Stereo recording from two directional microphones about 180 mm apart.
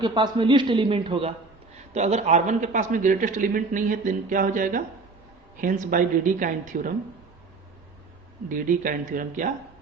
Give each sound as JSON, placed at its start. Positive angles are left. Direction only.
{"t": 0.0, "sound": "a man's voice", "side_deg": -25}
{"t": 8.4, "sound": "a man's voice", "side_deg": -45}